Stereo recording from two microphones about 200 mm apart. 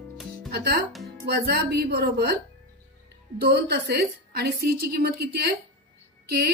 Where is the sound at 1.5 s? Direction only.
55° right (ahead or behind).